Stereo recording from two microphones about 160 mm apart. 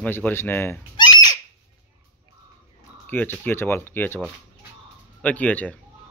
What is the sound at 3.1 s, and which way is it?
Speech, 10° left (ahead or behind).